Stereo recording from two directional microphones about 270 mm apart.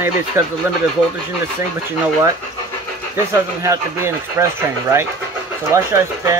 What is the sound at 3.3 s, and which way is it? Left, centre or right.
Speech, centre.